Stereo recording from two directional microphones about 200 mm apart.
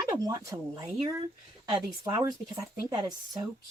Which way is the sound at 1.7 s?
20° right (ahead or behind).